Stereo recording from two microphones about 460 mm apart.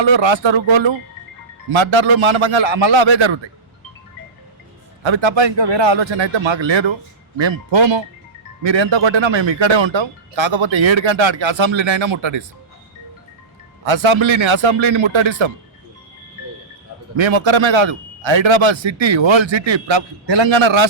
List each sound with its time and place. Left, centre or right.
0.0 s a man's voice: right
5.0 s a man's voice: right
13.8 s a man's voice: right
17.2 s a man's voice: right